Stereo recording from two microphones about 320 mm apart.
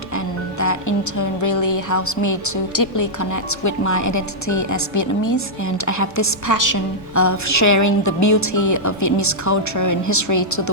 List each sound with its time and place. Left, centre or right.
0.6 s a woman's voice: left
7.2 s a woman's voice: left